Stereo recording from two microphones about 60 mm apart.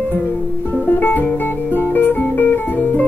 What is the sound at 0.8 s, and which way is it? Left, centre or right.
Music, left.